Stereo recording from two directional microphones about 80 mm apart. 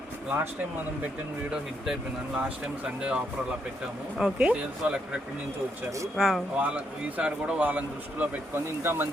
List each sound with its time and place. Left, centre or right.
1.8 s speech: centre
4.2 s speech: centre
6.1 s speech: centre
6.6 s speech: centre
8.6 s speech: right